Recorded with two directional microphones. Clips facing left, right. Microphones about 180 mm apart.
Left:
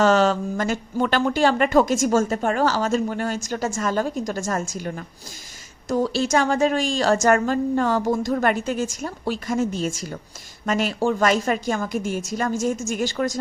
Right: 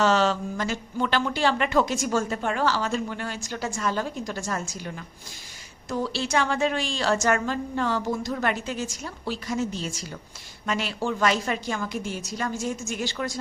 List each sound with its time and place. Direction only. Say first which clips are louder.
0.0 s speech: left 4 dB; 50° left (ahead or behind)